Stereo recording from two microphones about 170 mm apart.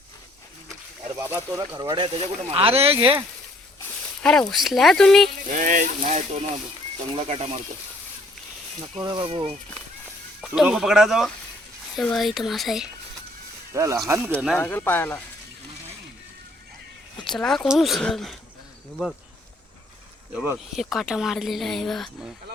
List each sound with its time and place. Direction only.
1.2 s speech: 15° right (ahead or behind); by 3.1 s 35° right (ahead or behind)
3.8 s speech: 5° left (ahead or behind)
5.5 s speech: 50° right (ahead or behind)
9.0 s speech: 30° right (ahead or behind)
10.4 s speech: 5° right (ahead or behind)
13.7 s speech: 20° right (ahead or behind)
14.6 s speech: 10° left (ahead or behind)
17.2 s speech: centre (ahead or behind)
20.3 s speech: 10° right (ahead or behind)
20.7 s speech: centre (ahead or behind)